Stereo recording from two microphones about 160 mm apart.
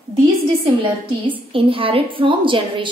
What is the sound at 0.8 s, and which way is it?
A woman's voice, 30° right (ahead or behind).